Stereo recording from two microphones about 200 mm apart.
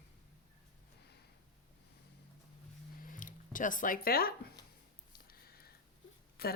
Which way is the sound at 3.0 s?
40° left (ahead or behind).